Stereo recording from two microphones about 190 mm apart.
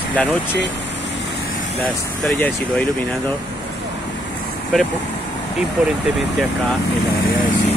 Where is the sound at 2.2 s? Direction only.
10° left (ahead or behind).